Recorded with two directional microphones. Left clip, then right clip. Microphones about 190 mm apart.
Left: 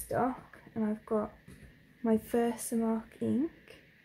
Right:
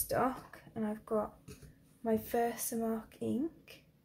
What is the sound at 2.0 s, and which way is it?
Speech, 30° left (ahead or behind).